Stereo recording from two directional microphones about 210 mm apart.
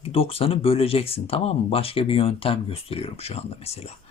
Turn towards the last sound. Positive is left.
turn(degrees=30)  # may be behind; listen again after turning